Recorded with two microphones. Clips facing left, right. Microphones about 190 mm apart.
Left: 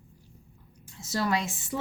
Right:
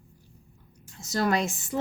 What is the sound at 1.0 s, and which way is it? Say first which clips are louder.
Speech: right 3 dB; 45° right (ahead or behind).